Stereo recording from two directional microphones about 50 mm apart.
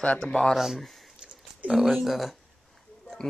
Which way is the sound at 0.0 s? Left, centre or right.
Centre.